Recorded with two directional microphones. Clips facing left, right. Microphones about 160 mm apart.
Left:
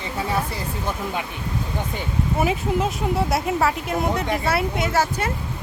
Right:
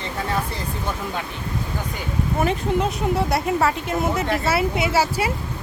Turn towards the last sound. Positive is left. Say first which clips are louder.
# right 1 dB
turn(degrees=-10)  # may be behind; listen again after turning